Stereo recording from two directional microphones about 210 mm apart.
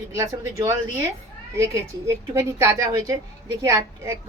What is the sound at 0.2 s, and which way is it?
A woman's voice, 15° right (ahead or behind).